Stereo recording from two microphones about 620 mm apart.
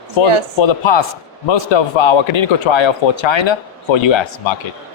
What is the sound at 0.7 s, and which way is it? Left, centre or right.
A man's voice, left.